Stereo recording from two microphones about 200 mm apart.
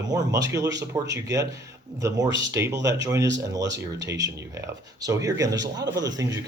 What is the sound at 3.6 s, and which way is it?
Speech, 60° right (ahead or behind).